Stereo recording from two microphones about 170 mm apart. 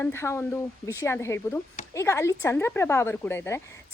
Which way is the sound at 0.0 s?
15° left (ahead or behind).